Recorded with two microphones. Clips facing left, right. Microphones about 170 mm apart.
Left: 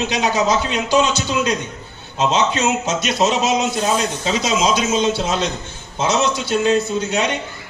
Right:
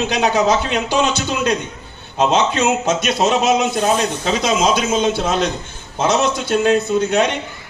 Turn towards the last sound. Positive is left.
turn(degrees=-55)  # may be behind; listen again after turning